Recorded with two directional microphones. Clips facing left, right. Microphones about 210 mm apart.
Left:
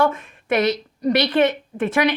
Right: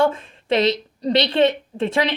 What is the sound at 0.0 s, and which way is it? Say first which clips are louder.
A woman's voice: right 1 dB; 30° right (ahead or behind).